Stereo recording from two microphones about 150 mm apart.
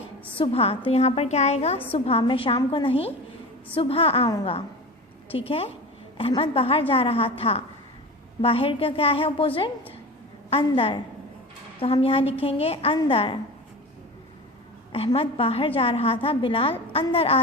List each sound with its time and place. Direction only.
0.3 s a woman's voice: 40° left (ahead or behind)
5.3 s a woman's voice: 40° left (ahead or behind)
10.5 s a woman's voice: 40° left (ahead or behind)
14.9 s a woman's voice: 40° left (ahead or behind)